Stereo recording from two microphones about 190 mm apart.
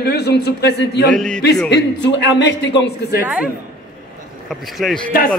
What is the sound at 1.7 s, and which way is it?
A man's voice, 70° left (ahead or behind).